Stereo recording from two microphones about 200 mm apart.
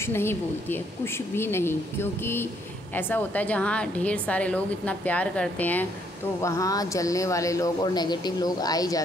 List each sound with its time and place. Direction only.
0.0 s speech: 10° left (ahead or behind)